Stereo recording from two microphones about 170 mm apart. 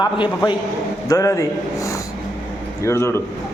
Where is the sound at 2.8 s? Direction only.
15° left (ahead or behind).